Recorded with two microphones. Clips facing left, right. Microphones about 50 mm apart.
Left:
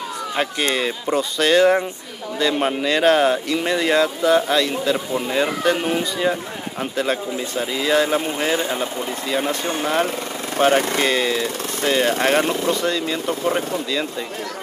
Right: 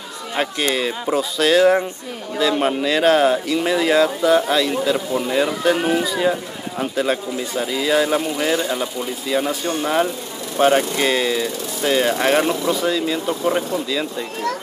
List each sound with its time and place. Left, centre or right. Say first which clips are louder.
0.4 s speech: right 1 dB; centre
8.5 s speech: right 1 dB; left
9.3 s speech: right 2 dB; centre
10.6 s speech: right 1 dB; centre